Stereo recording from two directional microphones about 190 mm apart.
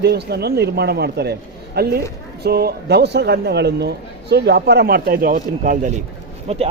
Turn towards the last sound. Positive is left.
turn(degrees=-35)  # may be behind; listen again after turning